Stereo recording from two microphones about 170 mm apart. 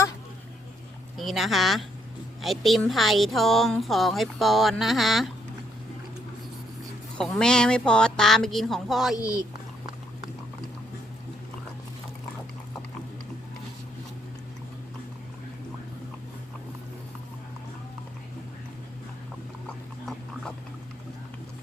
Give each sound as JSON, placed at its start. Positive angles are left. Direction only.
{"t": 1.1, "sound": "a woman's voice", "side_deg": 0}
{"t": 7.2, "sound": "a woman's voice", "side_deg": 5}
{"t": 9.1, "sound": "speech", "side_deg": 20}